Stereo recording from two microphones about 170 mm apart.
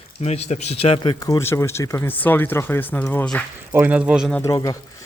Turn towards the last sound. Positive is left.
turn(degrees=20)  # may be behind; listen again after turning